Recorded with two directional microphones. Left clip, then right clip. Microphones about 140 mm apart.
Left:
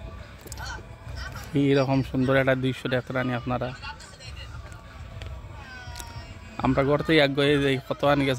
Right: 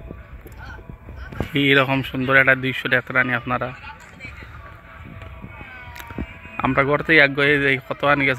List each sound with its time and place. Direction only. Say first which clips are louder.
1.5 s speech: right 6 dB; 15° left (ahead or behind)
6.5 s speech: right 4 dB; 15° left (ahead or behind)